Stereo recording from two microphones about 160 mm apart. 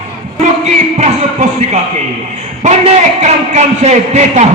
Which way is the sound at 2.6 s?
45° right (ahead or behind).